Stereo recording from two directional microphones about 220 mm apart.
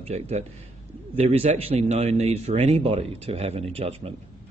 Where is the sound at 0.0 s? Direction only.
30° right (ahead or behind).